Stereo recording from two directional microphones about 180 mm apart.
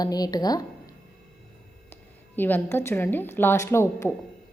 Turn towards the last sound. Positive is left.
turn(degrees=15)  # may be behind; listen again after turning